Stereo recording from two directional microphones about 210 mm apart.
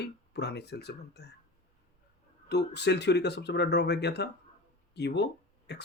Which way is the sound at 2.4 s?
55° left (ahead or behind).